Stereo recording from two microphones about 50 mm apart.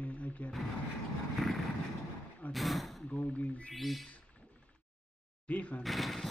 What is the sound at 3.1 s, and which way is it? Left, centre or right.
Speech, left.